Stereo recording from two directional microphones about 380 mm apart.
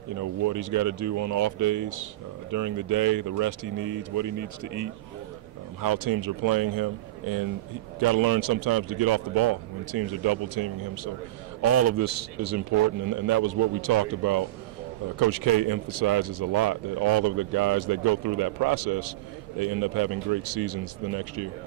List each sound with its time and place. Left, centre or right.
0.1 s speech: right
5.8 s a man's voice: right
11.6 s a man's voice: right